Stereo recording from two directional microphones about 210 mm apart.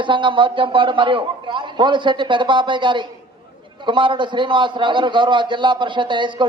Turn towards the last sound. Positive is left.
turn(degrees=-20)  # may be behind; listen again after turning